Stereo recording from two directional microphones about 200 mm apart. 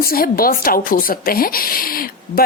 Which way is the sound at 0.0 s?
45° left (ahead or behind).